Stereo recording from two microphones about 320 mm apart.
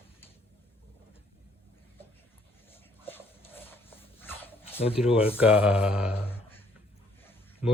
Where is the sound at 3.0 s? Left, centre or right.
Centre.